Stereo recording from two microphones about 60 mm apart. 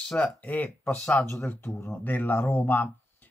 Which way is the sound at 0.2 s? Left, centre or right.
Left.